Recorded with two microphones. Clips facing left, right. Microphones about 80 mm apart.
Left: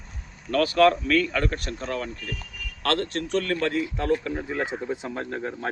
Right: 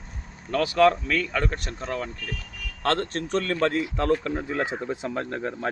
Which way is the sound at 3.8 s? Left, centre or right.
Right.